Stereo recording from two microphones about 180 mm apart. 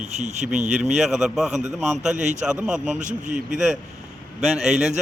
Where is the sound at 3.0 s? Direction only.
45° right (ahead or behind).